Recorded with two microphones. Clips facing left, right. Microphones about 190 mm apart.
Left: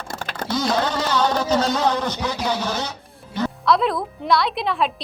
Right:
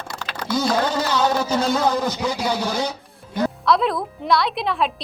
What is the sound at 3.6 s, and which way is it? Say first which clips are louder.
A woman's voice: left 2 dB; centre (ahead or behind).